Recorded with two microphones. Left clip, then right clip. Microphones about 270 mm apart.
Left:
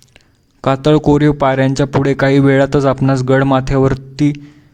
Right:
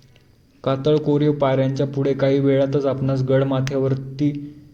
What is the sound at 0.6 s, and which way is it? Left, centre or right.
Speech, left.